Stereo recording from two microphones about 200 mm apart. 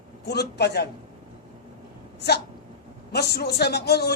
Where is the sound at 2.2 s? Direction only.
55° left (ahead or behind).